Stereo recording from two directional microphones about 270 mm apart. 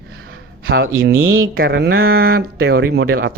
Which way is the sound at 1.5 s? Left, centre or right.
Right.